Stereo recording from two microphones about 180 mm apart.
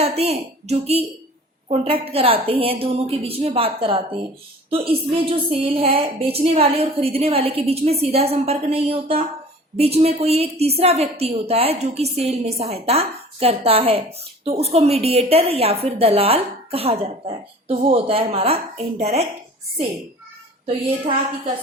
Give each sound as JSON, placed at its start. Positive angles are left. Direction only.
{"t": 0.2, "sound": "a woman's voice", "side_deg": -35}
{"t": 20.7, "sound": "a woman's voice", "side_deg": -35}